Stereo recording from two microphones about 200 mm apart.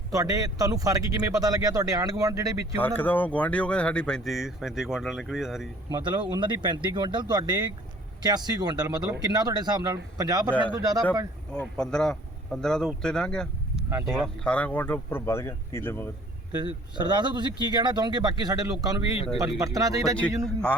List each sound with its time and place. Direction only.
0.1 s speech: 15° right (ahead or behind)
2.7 s speech: 10° left (ahead or behind)
5.9 s speech: 25° right (ahead or behind)
11.5 s speech: 5° left (ahead or behind)
16.5 s speech: 20° right (ahead or behind)
19.1 s speech: 30° left (ahead or behind)
19.4 s speech: 15° right (ahead or behind)